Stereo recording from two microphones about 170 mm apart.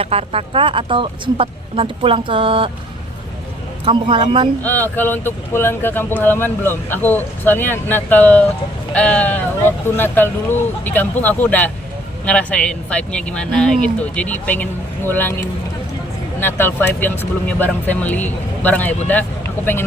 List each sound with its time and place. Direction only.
0.0 s speech: 35° right (ahead or behind)
3.8 s speech: 30° right (ahead or behind)
4.6 s speech: 10° left (ahead or behind)